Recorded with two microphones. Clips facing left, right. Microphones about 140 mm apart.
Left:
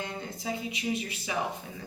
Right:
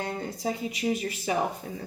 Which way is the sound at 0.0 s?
45° right (ahead or behind).